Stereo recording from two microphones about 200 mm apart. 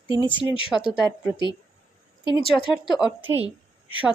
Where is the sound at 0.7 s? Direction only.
5° left (ahead or behind).